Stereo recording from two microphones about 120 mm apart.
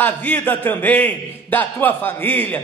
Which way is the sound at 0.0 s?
15° left (ahead or behind).